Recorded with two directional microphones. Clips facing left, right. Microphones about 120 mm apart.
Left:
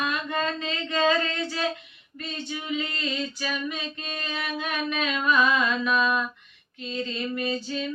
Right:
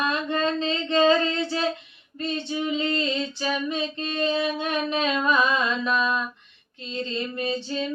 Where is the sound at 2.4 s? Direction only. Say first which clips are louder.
Right 3 dB; 25° right (ahead or behind).